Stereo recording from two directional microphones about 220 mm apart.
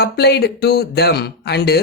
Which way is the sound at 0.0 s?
45° left (ahead or behind).